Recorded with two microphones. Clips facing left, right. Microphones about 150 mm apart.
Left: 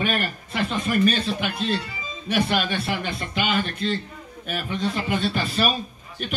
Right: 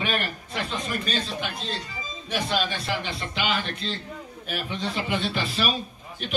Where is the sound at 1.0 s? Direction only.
65° left (ahead or behind).